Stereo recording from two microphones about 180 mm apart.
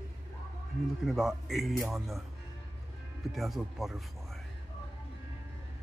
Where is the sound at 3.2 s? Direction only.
Centre (ahead or behind).